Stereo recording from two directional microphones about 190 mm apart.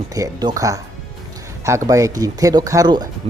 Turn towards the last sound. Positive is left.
turn(degrees=-20)  # may be behind; listen again after turning